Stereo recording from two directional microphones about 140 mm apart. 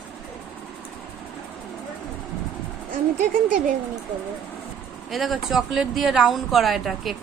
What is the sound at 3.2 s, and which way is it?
Speech, 70° right (ahead or behind).